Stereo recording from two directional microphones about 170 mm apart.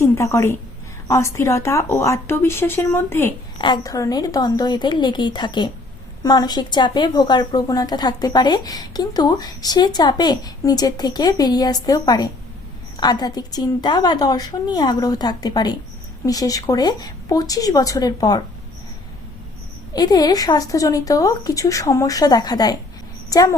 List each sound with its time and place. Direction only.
0.0 s a woman's voice: 15° left (ahead or behind)
19.9 s a woman's voice: 25° left (ahead or behind)